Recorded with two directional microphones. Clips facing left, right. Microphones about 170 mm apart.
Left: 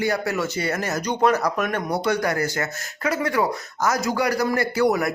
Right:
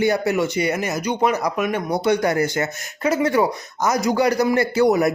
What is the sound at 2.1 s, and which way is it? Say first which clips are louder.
Speech: right 5 dB; 20° right (ahead or behind).